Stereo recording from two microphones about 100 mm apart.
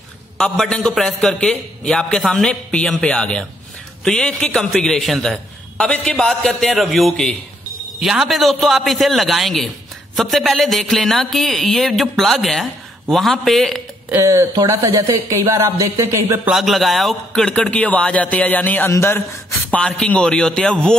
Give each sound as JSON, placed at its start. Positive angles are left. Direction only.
{"t": 0.4, "sound": "a man's voice", "side_deg": 5}
{"t": 14.1, "sound": "speech", "side_deg": -30}
{"t": 16.4, "sound": "a man's voice", "side_deg": 0}
{"t": 19.7, "sound": "a man's voice", "side_deg": 10}